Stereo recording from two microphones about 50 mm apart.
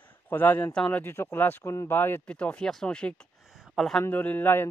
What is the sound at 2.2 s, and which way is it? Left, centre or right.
Speech, left.